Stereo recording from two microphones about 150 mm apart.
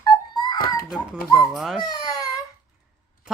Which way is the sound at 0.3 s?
25° left (ahead or behind).